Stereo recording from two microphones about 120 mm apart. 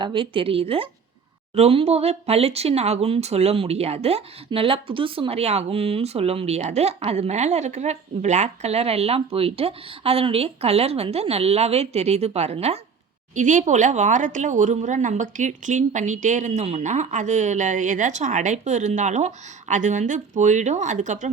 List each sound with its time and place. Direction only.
0.0 s speech: 45° right (ahead or behind); by 12.8 s 60° right (ahead or behind)
13.3 s speech: 90° right